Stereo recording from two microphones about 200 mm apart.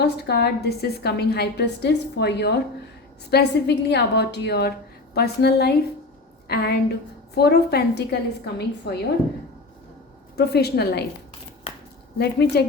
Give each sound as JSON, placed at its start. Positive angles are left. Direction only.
{"t": 0.0, "sound": "a woman's voice", "side_deg": 55}
{"t": 10.3, "sound": "a woman's voice", "side_deg": 55}
{"t": 11.7, "sound": "a sound", "side_deg": 30}
{"t": 12.1, "sound": "a woman's voice", "side_deg": 55}